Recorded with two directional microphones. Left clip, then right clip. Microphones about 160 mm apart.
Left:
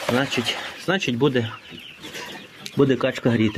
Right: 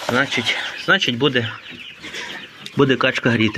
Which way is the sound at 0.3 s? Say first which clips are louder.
Right 4 dB; 25° left (ahead or behind).